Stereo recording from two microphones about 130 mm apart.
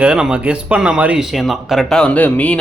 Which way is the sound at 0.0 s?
5° right (ahead or behind).